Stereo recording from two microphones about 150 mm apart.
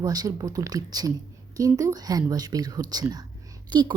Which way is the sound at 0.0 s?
25° right (ahead or behind).